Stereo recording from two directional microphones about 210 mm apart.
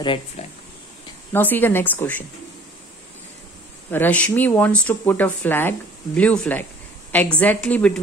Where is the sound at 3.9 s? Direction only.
10° left (ahead or behind).